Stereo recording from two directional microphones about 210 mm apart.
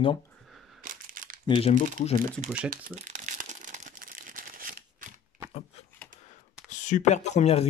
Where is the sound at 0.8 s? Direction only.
40° right (ahead or behind).